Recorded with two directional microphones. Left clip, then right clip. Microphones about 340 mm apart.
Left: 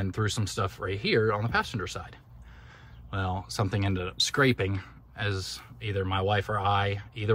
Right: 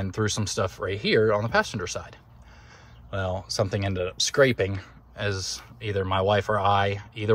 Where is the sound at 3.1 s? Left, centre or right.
Centre.